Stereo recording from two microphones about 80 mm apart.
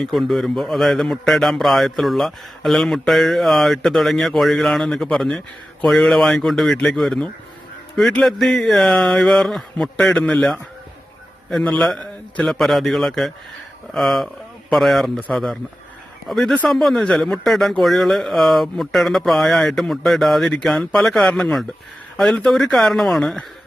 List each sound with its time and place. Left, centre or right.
0.0 s a man's voice: centre
11.6 s speech: centre
12.5 s a man's voice: centre